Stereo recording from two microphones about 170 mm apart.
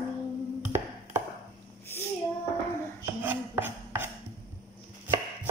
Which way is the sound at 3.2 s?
10° right (ahead or behind).